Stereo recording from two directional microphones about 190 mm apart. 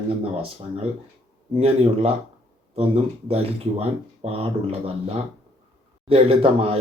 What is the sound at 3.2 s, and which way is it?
Speech, 30° right (ahead or behind).